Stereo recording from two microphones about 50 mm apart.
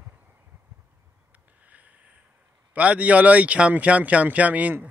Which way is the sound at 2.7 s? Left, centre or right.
Right.